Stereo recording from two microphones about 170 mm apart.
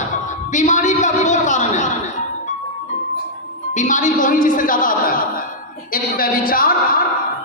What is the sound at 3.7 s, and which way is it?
A man's voice, 45° left (ahead or behind).